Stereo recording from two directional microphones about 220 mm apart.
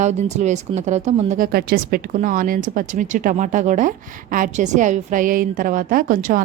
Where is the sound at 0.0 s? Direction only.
30° right (ahead or behind).